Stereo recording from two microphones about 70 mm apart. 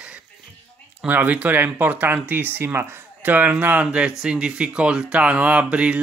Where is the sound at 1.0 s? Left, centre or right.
Right.